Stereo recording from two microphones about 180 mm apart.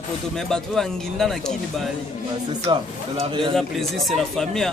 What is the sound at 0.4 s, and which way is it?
Speech, centre (ahead or behind).